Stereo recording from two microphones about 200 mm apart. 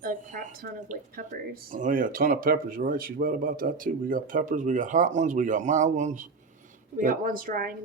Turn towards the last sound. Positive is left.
turn(degrees=-45)  # may be behind; listen again after turning